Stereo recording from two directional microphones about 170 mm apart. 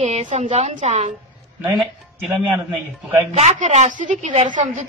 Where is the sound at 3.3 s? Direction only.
45° right (ahead or behind).